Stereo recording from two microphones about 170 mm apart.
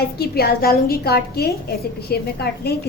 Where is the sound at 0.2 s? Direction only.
65° left (ahead or behind).